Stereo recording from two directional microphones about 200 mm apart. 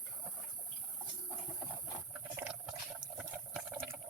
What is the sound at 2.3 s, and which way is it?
Boiling, 5° right (ahead or behind).